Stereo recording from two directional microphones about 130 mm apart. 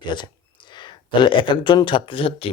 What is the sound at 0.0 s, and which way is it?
Speech, 35° left (ahead or behind).